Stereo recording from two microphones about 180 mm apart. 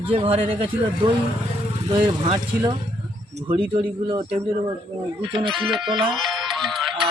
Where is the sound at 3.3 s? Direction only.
30° right (ahead or behind).